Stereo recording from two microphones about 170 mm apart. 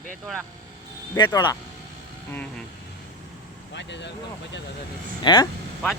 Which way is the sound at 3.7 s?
90° left.